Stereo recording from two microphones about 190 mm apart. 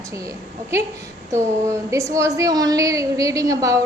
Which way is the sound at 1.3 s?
15° right (ahead or behind).